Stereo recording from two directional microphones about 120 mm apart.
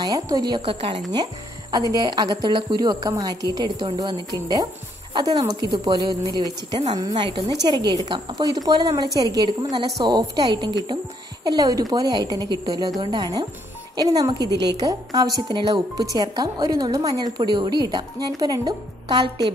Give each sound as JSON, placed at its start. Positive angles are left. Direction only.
{"t": 0.0, "sound": "a woman's voice", "side_deg": -35}
{"t": 0.6, "sound": "a woman's voice", "side_deg": -50}
{"t": 1.1, "sound": "a woman's voice", "side_deg": -30}